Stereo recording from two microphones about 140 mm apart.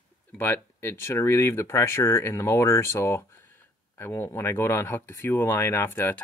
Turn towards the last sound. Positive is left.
turn(degrees=15)  # may be behind; listen again after turning